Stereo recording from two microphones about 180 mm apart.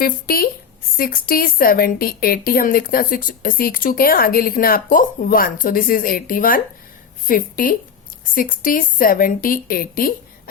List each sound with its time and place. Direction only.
0.0 s a woman's voice: 55° left (ahead or behind)